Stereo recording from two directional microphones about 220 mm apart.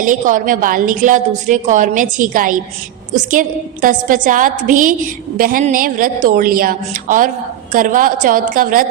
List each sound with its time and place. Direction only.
0.0 s a woman's voice: 35° right (ahead or behind)